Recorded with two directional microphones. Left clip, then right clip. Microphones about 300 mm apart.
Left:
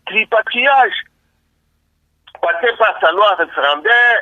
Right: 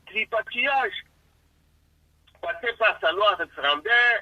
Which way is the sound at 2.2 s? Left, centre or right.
Left.